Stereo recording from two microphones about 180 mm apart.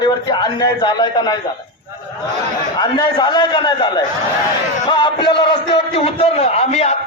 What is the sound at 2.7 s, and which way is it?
A man's voice, 25° left (ahead or behind).